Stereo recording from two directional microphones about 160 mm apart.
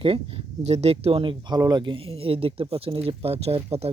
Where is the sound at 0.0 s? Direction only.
35° right (ahead or behind).